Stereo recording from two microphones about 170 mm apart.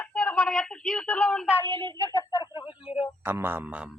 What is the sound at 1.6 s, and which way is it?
Speech, 25° right (ahead or behind).